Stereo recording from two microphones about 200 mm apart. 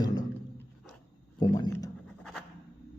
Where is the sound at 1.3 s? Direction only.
20° left (ahead or behind).